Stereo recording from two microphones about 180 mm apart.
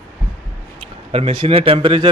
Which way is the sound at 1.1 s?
30° right (ahead or behind).